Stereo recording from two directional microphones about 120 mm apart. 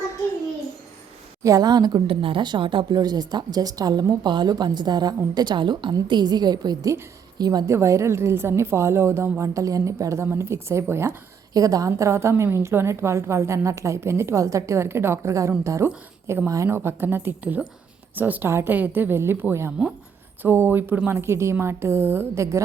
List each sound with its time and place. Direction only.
1.5 s a woman's voice: 30° right (ahead or behind)
2.0 s a woman's voice: 45° right (ahead or behind); by 22.6 s 25° right (ahead or behind)